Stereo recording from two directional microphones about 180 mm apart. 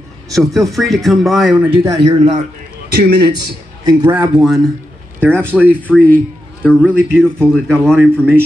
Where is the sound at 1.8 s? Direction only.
15° right (ahead or behind).